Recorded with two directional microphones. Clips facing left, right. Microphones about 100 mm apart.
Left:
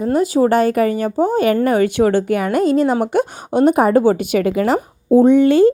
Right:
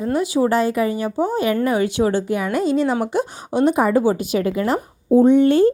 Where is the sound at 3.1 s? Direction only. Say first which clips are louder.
Left 4 dB; 55° left (ahead or behind); by 5.7 s 90° left.